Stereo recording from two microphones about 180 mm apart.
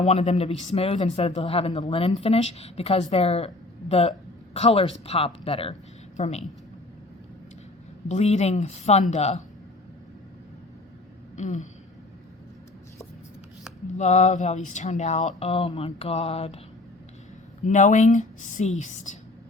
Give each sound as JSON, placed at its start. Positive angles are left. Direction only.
{"t": 0.0, "sound": "speech", "side_deg": 40}
{"t": 8.0, "sound": "speech", "side_deg": 40}
{"t": 11.3, "sound": "speech", "side_deg": 40}
{"t": 14.0, "sound": "speech", "side_deg": 40}
{"t": 17.7, "sound": "speech", "side_deg": 45}